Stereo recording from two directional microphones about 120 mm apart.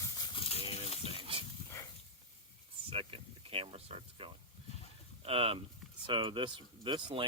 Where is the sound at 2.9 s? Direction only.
50° right (ahead or behind).